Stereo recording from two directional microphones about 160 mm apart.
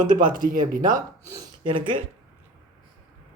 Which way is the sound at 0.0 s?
60° right (ahead or behind).